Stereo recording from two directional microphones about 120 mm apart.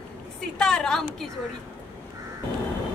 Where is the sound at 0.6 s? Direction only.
5° left (ahead or behind).